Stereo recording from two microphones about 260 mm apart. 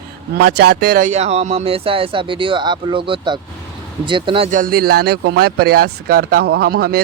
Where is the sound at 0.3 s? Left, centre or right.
Right.